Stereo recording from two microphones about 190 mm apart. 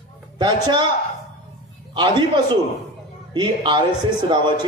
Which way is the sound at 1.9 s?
25° right (ahead or behind).